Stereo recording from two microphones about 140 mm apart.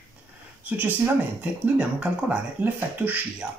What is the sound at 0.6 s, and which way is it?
Speech, 10° right (ahead or behind).